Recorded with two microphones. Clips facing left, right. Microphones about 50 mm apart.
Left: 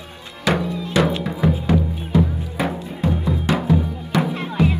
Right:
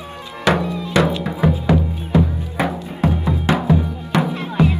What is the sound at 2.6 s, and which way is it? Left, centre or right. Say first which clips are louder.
Music: right 2 dB; right.